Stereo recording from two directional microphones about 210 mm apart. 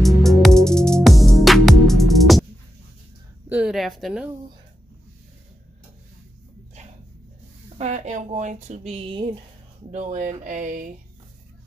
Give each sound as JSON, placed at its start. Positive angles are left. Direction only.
{"t": 0.0, "sound": "music", "side_deg": 0}
{"t": 3.4, "sound": "a sound", "side_deg": -5}
{"t": 7.7, "sound": "speech", "side_deg": -35}